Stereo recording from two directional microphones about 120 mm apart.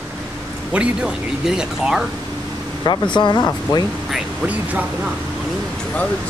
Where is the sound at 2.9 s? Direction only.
40° left (ahead or behind).